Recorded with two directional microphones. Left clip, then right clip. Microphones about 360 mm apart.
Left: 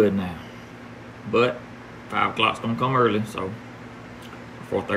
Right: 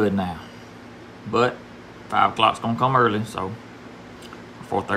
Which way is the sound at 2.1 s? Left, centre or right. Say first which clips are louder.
Right 4 dB; centre.